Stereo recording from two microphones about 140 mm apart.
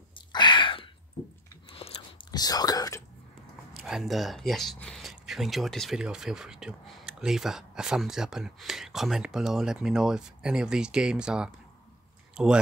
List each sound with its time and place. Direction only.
0.1 s a sound: 35° left (ahead or behind)
1.7 s whispering: 40° left (ahead or behind)
3.7 s speech: centre (ahead or behind)